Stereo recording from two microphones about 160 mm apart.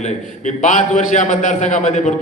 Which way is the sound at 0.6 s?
50° left (ahead or behind).